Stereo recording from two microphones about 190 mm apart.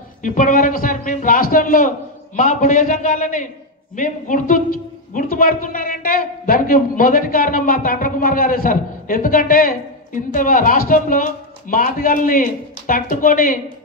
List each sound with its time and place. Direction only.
0.2 s a woman's voice: 40° left (ahead or behind)